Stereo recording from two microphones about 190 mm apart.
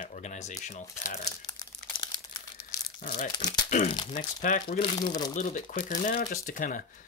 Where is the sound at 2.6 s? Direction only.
50° left (ahead or behind).